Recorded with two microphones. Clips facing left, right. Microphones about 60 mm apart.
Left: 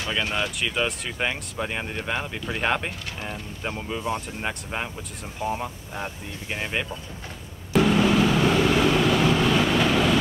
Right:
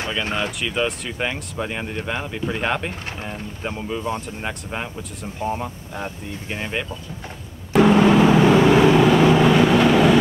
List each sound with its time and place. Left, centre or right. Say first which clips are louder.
0.2 s speech: right 2 dB; right
0.6 s speech: right 3 dB; centre
7.8 s vehicle: right 7 dB; right
8.1 s vehicle: right 6 dB; right
8.9 s vehicle: right 6 dB; centre